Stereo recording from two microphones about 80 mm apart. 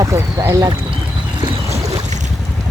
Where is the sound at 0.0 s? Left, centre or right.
Right.